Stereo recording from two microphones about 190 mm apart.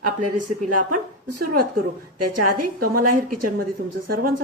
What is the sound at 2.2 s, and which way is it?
A woman's voice, 50° right (ahead or behind).